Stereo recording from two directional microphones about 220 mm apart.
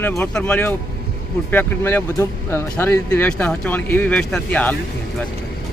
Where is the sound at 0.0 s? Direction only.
5° left (ahead or behind).